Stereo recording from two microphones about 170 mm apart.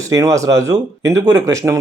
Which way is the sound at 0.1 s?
20° right (ahead or behind).